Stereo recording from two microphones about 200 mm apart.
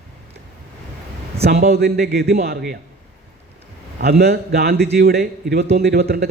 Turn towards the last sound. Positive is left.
turn(degrees=-50)  # may be behind; listen again after turning